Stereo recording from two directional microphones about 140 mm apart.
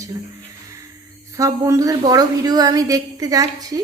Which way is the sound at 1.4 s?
25° right (ahead or behind).